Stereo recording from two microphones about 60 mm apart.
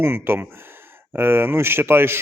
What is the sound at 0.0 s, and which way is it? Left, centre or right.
A man's voice, right.